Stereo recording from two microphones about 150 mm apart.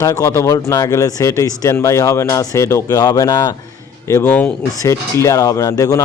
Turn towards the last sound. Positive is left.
turn(degrees=25)  # may be behind; listen again after turning